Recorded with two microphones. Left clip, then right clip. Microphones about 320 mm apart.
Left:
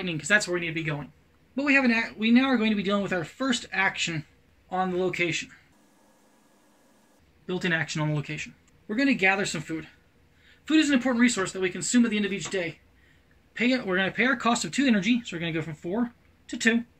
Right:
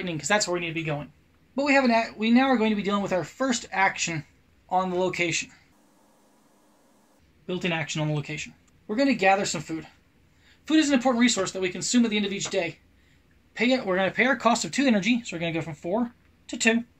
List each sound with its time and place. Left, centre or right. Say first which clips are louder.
0.0 s speech: left 1 dB; centre
7.4 s speech: left 1 dB; centre